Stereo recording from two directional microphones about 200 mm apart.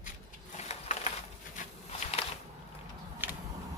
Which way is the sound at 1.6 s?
40° left (ahead or behind).